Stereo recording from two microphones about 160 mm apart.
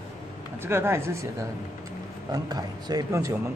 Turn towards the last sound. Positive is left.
turn(degrees=-20)  # may be behind; listen again after turning